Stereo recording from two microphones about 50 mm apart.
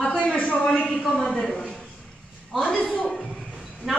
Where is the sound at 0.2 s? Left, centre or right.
Left.